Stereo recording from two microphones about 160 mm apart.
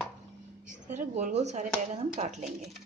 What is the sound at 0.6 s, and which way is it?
Speech, 50° right (ahead or behind).